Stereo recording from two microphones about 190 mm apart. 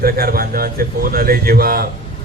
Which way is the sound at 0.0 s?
50° right (ahead or behind).